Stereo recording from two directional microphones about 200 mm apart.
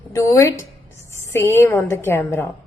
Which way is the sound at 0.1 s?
10° left (ahead or behind).